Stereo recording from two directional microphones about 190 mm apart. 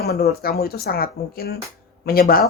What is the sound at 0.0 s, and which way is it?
A woman's voice, 55° left (ahead or behind).